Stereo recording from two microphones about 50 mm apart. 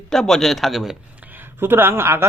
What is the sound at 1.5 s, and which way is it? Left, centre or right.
Speech, right.